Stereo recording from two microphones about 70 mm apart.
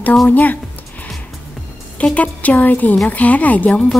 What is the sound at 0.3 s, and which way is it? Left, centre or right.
Speech, left.